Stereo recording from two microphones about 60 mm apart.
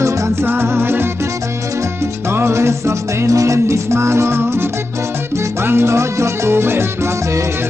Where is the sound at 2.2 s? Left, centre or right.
Right.